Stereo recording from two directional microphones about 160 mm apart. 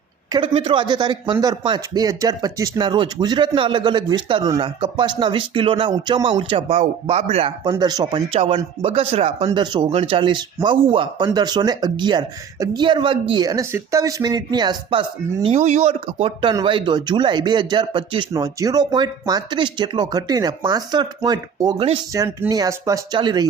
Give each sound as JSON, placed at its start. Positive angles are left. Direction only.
{"t": 0.3, "sound": "speech", "side_deg": -30}
{"t": 7.6, "sound": "speech", "side_deg": -25}
{"t": 8.3, "sound": "speech", "side_deg": -35}
{"t": 15.4, "sound": "speech", "side_deg": -45}